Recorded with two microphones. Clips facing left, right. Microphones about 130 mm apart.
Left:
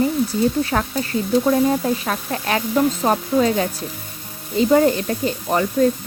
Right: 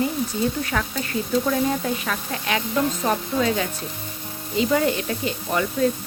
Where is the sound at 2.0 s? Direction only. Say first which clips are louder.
Left 4 dB; 40° left (ahead or behind).